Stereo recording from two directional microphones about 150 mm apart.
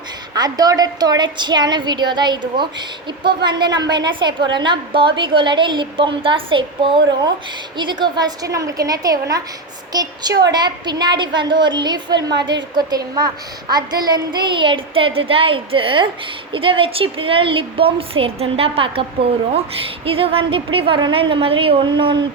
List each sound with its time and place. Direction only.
0.3 s a woman's voice: 25° right (ahead or behind)
20.1 s a woman's voice: 40° right (ahead or behind)